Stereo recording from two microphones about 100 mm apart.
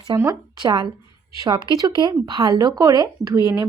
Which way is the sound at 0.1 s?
45° right (ahead or behind).